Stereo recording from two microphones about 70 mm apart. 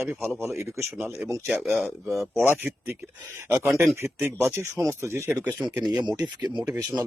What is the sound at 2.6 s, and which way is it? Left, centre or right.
Speech, right.